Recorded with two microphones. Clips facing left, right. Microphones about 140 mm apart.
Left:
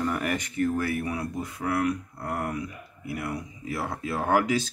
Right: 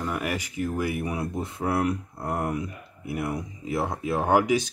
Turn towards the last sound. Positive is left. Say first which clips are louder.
# right 2 dB
turn(degrees=-15)  # may be behind; listen again after turning